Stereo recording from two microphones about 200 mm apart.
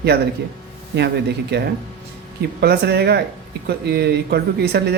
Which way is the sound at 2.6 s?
55° right (ahead or behind).